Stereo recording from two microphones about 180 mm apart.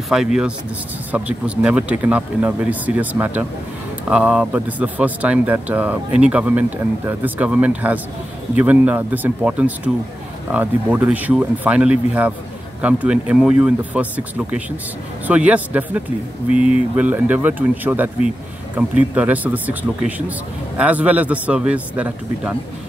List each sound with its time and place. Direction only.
0.1 s speech: 5° right (ahead or behind)